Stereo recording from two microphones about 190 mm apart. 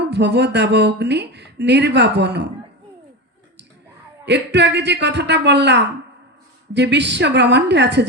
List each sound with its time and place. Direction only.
0.0 s speech: 65° right (ahead or behind)
4.3 s speech: 65° right (ahead or behind)